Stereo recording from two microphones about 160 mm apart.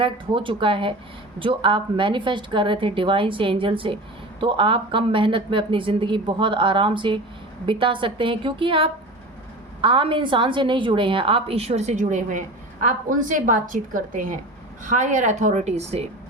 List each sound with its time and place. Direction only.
0.0 s a woman's voice: 30° right (ahead or behind)